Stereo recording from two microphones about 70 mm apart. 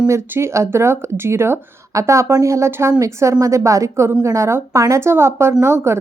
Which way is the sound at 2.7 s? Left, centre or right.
Right.